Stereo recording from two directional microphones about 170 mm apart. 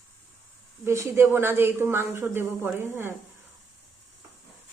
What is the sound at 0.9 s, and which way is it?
Speech, 15° right (ahead or behind).